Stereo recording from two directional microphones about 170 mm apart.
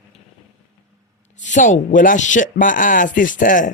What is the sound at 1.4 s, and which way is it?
Speech, 45° left (ahead or behind).